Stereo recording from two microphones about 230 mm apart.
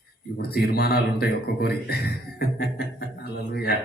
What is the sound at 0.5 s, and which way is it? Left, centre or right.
A man's voice, left.